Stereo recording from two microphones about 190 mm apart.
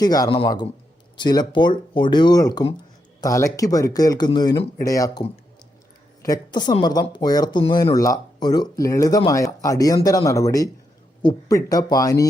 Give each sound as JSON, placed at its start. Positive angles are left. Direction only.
{"t": 0.0, "sound": "speech", "side_deg": 20}
{"t": 6.2, "sound": "speech", "side_deg": 20}